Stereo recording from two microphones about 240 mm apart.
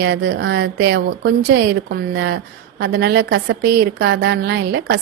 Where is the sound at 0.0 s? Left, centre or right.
Right.